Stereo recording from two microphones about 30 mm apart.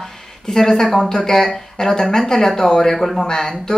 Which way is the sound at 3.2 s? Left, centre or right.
Left.